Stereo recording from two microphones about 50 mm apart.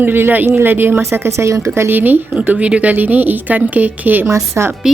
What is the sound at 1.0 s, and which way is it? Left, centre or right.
Speech, right.